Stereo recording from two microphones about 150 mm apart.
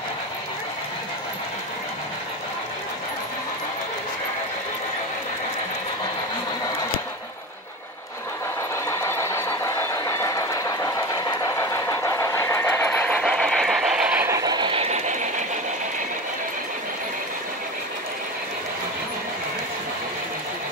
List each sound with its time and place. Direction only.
8.8 s vehicle: 20° left (ahead or behind); by 14.3 s 10° right (ahead or behind)
14.3 s a sound: 25° right (ahead or behind)
14.9 s train: 55° right (ahead or behind)